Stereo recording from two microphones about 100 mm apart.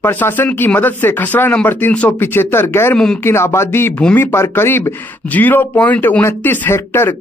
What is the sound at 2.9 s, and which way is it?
Speech, 5° left (ahead or behind).